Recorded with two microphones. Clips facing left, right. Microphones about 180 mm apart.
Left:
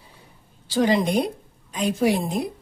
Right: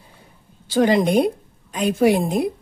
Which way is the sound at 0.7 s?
55° right (ahead or behind).